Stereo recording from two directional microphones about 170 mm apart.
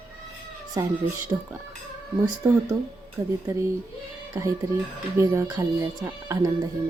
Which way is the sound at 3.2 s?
20° right (ahead or behind).